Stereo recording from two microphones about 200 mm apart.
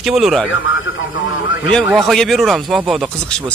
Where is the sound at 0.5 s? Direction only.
75° left (ahead or behind).